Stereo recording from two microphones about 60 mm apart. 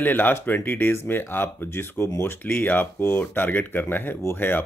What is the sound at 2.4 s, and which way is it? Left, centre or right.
Speech, left.